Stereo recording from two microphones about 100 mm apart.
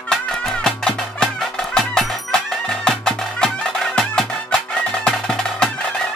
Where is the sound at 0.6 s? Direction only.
5° left (ahead or behind).